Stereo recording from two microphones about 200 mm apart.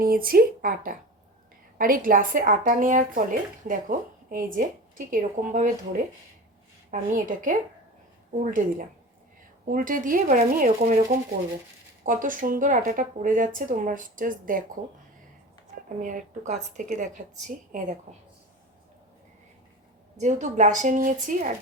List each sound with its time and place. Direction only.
0.0 s a woman's voice: 45° right (ahead or behind)
9.6 s a woman's voice: 45° right (ahead or behind)
12.0 s speech: 40° right (ahead or behind)
16.0 s speech: 40° right (ahead or behind)
20.1 s speech: 35° right (ahead or behind)